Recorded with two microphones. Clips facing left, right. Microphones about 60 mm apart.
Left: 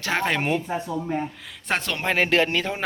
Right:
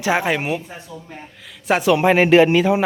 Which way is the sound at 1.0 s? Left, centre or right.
Left.